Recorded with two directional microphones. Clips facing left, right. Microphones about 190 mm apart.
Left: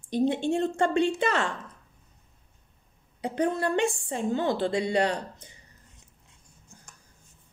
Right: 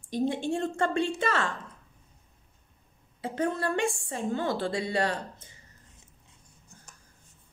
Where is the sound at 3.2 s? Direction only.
20° left (ahead or behind).